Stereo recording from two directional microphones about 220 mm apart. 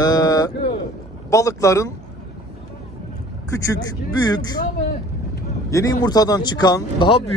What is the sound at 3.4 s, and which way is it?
Speech, 15° left (ahead or behind).